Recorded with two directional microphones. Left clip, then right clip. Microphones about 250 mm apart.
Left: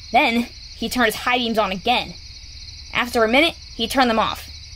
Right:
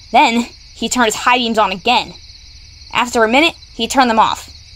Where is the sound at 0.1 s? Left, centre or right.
Centre.